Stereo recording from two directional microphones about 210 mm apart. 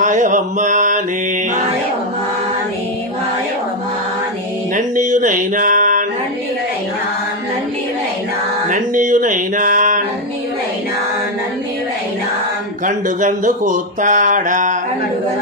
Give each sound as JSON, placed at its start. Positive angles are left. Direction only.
{"t": 0.0, "sound": "speech", "side_deg": -40}
{"t": 4.7, "sound": "mantra", "side_deg": -35}
{"t": 8.6, "sound": "speech", "side_deg": -40}
{"t": 12.8, "sound": "speech", "side_deg": -40}